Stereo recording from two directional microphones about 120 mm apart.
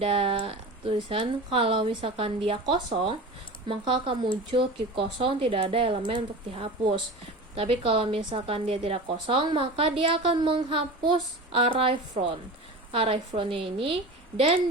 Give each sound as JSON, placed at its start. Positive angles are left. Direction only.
{"t": 0.0, "sound": "speech", "side_deg": -50}